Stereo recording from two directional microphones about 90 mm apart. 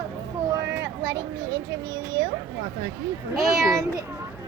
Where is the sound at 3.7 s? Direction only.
40° right (ahead or behind).